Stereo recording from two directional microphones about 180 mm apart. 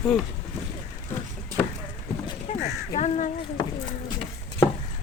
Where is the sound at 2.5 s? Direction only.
40° left (ahead or behind).